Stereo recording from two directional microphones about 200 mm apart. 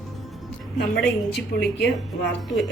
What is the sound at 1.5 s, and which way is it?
Speech, 45° left (ahead or behind).